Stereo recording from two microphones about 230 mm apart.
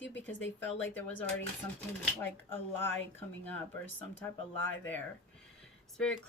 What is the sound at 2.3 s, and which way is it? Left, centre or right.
Speech, centre.